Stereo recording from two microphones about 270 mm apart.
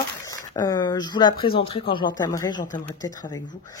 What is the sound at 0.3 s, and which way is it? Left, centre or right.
Speech, centre.